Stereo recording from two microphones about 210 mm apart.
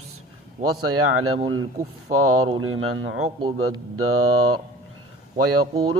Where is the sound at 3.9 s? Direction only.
90° right.